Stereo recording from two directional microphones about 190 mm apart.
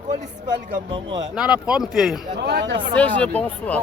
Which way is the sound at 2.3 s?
60° right (ahead or behind).